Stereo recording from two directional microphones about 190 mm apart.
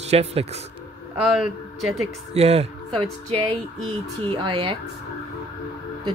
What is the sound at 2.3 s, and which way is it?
Speech, 35° right (ahead or behind).